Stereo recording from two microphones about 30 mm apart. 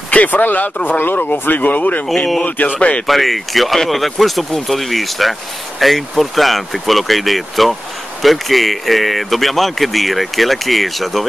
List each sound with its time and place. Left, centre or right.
0.1 s speech: left
0.8 s speech: left
2.1 s speech: centre
2.4 s speech: left
3.1 s speech: centre